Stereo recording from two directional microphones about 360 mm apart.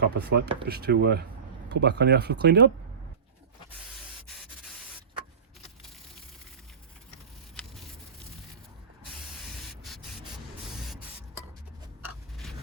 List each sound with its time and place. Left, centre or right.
0.0 s speech: right
4.3 s rub: centre
9.5 s spray: centre
12.0 s a sound: centre